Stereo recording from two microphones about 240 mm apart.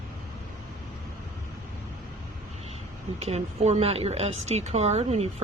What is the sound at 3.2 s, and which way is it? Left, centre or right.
A woman's voice, right.